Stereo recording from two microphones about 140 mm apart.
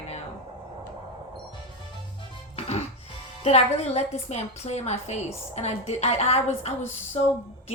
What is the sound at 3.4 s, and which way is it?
A woman's voice, 50° left (ahead or behind).